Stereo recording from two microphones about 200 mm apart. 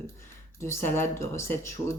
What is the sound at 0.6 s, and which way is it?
Speech, 10° left (ahead or behind).